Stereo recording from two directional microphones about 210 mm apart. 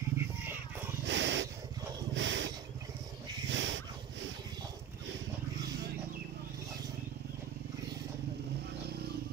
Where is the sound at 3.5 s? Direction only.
60° right (ahead or behind).